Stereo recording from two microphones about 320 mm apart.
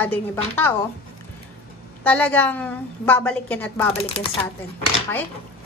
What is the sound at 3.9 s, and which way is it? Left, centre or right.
Speech, centre.